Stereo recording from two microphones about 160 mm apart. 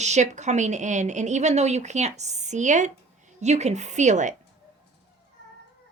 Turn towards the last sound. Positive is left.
turn(degrees=-50)  # may be behind; listen again after turning